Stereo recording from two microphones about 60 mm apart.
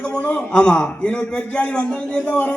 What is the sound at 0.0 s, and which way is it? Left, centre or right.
A man's voice, centre.